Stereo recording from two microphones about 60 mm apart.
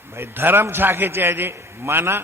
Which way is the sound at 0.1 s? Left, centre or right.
Right.